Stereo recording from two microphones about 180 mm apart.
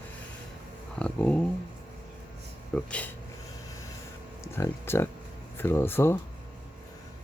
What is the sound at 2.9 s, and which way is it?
Speech, 5° left (ahead or behind).